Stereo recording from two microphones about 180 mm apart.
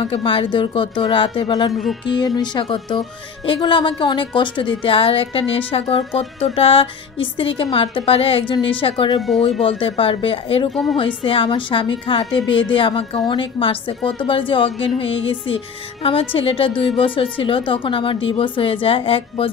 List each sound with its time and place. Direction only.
0.0 s a woman's voice: 30° left (ahead or behind)
1.7 s a woman's voice: centre (ahead or behind)
2.1 s a woman's voice: 25° left (ahead or behind)
9.6 s music: 30° left (ahead or behind)
10.7 s a woman's voice: centre (ahead or behind)
11.2 s a woman's voice: 30° left (ahead or behind)
15.0 s music: 30° left (ahead or behind)
16.3 s a woman's voice: 30° left (ahead or behind)